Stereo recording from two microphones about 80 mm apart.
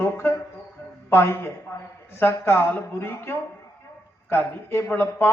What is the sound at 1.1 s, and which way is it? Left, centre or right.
A man's voice, left.